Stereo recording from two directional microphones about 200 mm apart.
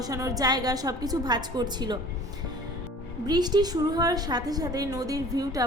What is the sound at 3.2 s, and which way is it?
A woman's voice, 20° right (ahead or behind).